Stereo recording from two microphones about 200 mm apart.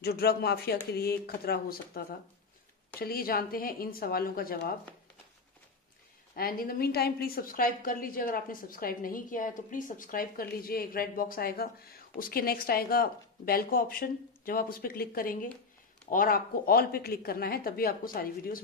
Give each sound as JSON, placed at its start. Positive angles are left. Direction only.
{"t": 0.0, "sound": "a woman's voice", "side_deg": 50}
{"t": 6.3, "sound": "a woman's voice", "side_deg": 45}